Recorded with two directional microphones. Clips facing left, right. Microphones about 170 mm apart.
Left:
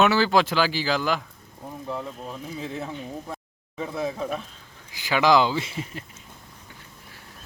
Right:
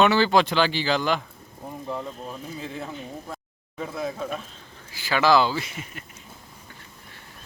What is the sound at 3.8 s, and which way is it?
Speech, 20° left (ahead or behind).